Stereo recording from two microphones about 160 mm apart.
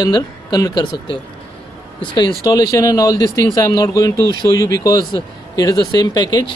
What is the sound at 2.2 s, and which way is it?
Speech, 25° left (ahead or behind).